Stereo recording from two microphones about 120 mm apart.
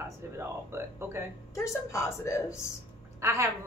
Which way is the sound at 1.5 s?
25° left (ahead or behind).